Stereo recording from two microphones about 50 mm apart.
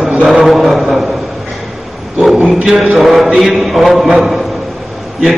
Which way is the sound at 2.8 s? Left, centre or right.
Centre.